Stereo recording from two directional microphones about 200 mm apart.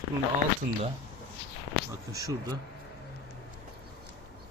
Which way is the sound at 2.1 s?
15° right (ahead or behind).